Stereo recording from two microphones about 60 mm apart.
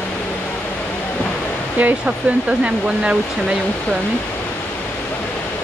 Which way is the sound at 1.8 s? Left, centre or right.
Right.